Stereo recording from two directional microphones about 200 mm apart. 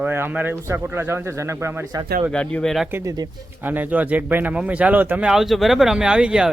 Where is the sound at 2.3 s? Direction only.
5° left (ahead or behind).